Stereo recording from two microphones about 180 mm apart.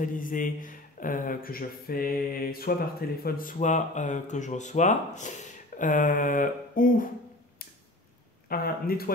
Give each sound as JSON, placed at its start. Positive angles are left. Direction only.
{"t": 0.0, "sound": "a man's voice", "side_deg": 50}
{"t": 3.5, "sound": "a man's voice", "side_deg": 40}
{"t": 8.5, "sound": "speech", "side_deg": 55}